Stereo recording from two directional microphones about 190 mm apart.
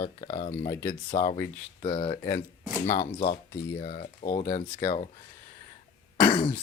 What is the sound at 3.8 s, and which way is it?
Speech, 40° left (ahead or behind).